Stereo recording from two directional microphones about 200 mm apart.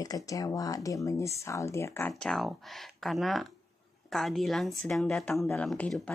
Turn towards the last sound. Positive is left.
turn(degrees=5)  # may be behind; listen again after turning